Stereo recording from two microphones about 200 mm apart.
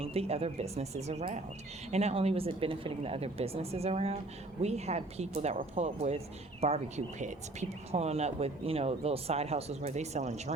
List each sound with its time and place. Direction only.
0.0 s speech: 30° right (ahead or behind)